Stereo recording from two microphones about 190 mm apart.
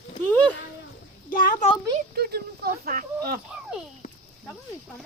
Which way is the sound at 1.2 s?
45° left (ahead or behind).